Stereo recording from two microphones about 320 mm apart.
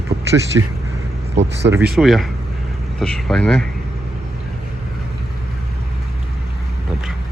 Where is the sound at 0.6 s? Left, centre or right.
Right.